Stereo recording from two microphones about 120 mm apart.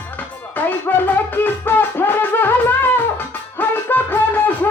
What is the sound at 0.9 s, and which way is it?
Music, 15° left (ahead or behind).